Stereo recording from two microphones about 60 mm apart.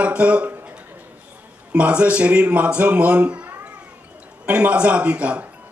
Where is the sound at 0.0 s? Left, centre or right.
Right.